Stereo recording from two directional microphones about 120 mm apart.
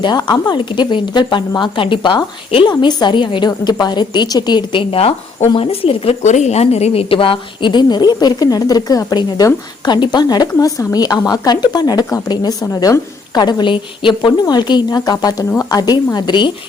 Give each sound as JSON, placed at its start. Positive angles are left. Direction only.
{"t": 0.0, "sound": "a woman's voice", "side_deg": 40}
{"t": 6.2, "sound": "a woman's voice", "side_deg": 70}